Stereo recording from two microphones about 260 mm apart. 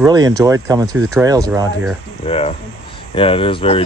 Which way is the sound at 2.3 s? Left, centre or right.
Left.